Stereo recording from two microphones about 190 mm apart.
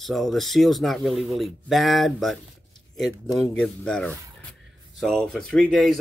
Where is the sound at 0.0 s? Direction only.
Centre (ahead or behind).